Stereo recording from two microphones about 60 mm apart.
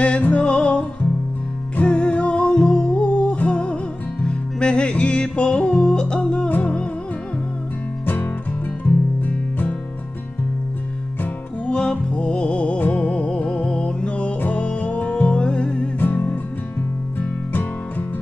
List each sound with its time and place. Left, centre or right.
0.2 s music: centre
8.8 s music: left
11.6 s music: centre
16.0 s music: left